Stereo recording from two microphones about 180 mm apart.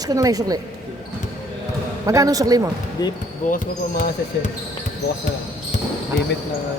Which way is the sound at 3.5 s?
45° left (ahead or behind).